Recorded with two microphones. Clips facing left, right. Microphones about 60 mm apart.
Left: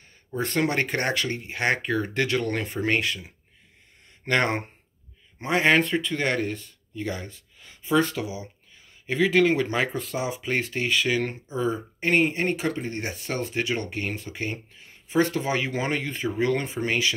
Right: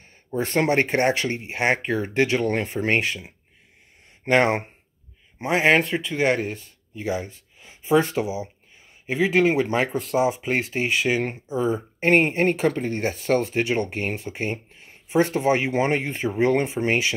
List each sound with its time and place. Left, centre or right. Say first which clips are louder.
0.6 s speech: right 5 dB; right